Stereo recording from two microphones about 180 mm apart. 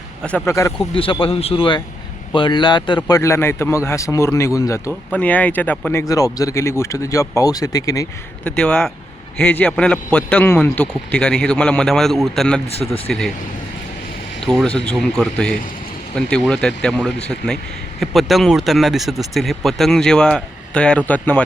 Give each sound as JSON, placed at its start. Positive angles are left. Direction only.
{"t": 0.2, "sound": "a man's voice", "side_deg": 5}
{"t": 0.9, "sound": "a man's voice", "side_deg": 30}
{"t": 8.4, "sound": "a man's voice", "side_deg": 5}
{"t": 14.4, "sound": "a man's voice", "side_deg": 5}